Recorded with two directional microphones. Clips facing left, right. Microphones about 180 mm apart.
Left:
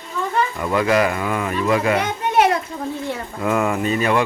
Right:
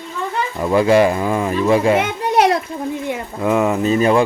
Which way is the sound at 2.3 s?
35° right (ahead or behind).